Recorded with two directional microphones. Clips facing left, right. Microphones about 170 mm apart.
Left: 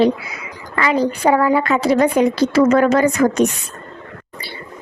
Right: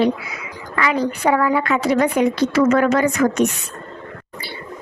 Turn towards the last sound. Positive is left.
turn(degrees=35)  # may be behind; listen again after turning